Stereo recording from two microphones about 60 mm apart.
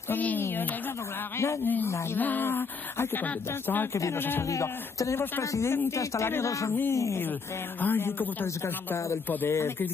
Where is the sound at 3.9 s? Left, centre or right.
Left.